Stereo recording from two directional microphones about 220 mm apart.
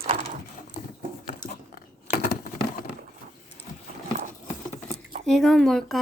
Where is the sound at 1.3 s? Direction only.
40° left (ahead or behind).